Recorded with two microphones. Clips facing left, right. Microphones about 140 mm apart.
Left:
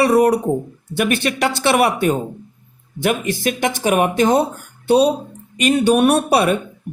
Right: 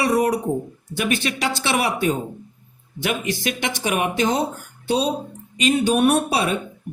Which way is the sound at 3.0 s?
45° left (ahead or behind).